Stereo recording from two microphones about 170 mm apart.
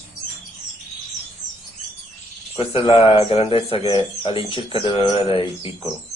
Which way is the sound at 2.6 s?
30° left (ahead or behind).